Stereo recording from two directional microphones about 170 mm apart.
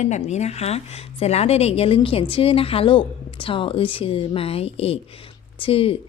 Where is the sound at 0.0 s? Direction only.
40° left (ahead or behind).